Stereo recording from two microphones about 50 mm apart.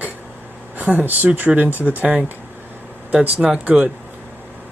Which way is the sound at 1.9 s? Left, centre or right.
Right.